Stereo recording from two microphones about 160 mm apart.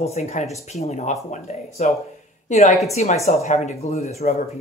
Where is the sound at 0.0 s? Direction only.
45° left (ahead or behind).